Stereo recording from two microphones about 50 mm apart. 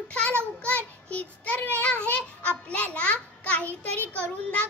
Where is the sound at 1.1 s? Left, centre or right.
Left.